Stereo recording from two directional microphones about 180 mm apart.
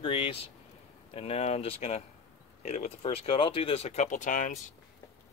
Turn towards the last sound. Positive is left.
turn(degrees=45)  # may be behind; listen again after turning